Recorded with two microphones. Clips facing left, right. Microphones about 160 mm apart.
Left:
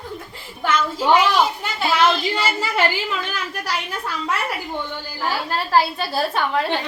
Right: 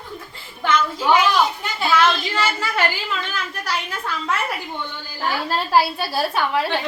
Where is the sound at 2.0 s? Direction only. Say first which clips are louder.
Left 1 dB; 25° left (ahead or behind).